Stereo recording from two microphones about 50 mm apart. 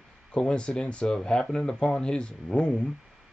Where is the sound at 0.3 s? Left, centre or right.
Centre.